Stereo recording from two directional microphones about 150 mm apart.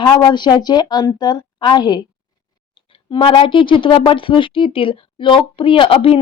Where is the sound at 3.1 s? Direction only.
35° left (ahead or behind).